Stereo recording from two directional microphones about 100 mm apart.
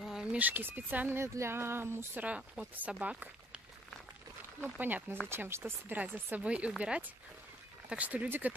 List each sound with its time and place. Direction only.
0.0 s speech: 5° right (ahead or behind)
4.6 s speech: 20° right (ahead or behind)